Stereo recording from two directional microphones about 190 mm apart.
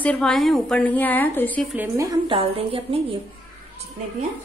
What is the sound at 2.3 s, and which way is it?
Speech, 30° right (ahead or behind).